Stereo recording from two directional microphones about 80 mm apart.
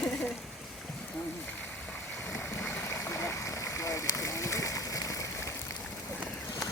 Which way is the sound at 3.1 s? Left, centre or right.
Left.